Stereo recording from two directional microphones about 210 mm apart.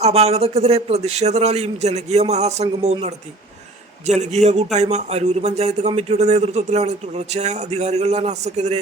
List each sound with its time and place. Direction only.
0.0 s a man's voice: 30° right (ahead or behind)